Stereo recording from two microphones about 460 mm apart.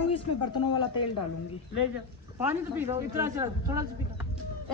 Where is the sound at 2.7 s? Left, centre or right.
Centre.